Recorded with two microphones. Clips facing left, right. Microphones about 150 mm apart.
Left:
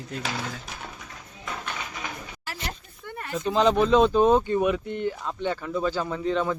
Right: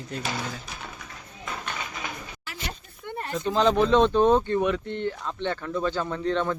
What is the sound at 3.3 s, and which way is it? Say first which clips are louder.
Speech: left 1 dB; 5° left (ahead or behind).